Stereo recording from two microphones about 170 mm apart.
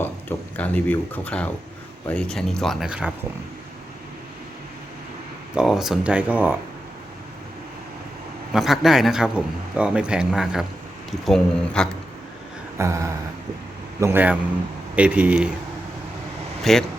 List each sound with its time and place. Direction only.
0.0 s a man's voice: 10° left (ahead or behind); by 3.1 s 5° right (ahead or behind)
5.5 s speech: centre (ahead or behind)
8.5 s a man's voice: centre (ahead or behind)
12.7 s a sound: 15° right (ahead or behind)
14.0 s speech: 10° right (ahead or behind)
16.7 s a man's voice: centre (ahead or behind)